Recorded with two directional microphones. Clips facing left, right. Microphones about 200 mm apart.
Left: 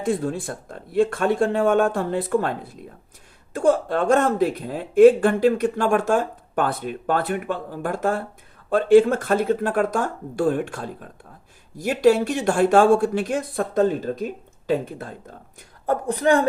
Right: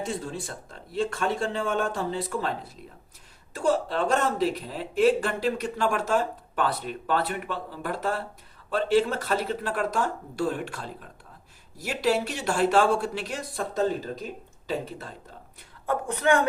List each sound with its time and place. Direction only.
0.0 s speech: 55° left (ahead or behind)
15.9 s speech: 35° left (ahead or behind)